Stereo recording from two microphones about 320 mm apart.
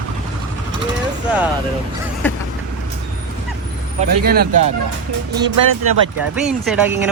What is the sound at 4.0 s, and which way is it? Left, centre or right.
Speech, right.